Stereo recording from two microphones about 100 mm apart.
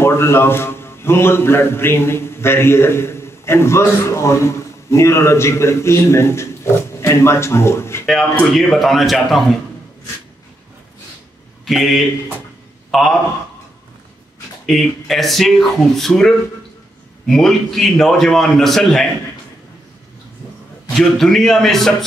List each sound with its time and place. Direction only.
0.0 s a man's voice: 25° left (ahead or behind)
8.5 s a man's voice: centre (ahead or behind)
11.6 s a man's voice: centre (ahead or behind)
14.7 s a man's voice: centre (ahead or behind)
21.0 s a man's voice: 5° left (ahead or behind)